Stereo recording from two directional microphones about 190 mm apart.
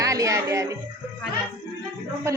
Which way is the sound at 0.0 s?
15° right (ahead or behind).